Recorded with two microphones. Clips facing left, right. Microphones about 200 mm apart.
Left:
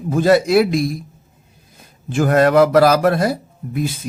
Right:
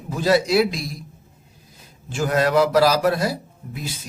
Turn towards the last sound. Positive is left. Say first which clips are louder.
# left 11 dB
turn(degrees=55)  # may be behind; listen again after turning